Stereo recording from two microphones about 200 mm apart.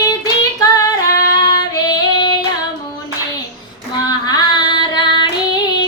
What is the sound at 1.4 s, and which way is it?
Female singing, 20° left (ahead or behind).